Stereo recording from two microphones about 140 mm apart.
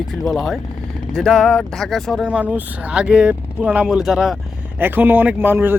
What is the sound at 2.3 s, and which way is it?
Speech, 10° right (ahead or behind).